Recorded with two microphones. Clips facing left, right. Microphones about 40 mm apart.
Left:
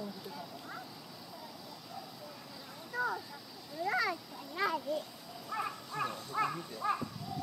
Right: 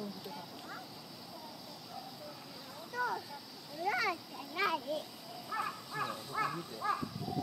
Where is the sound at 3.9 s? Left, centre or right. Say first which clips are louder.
Left 1 dB; centre.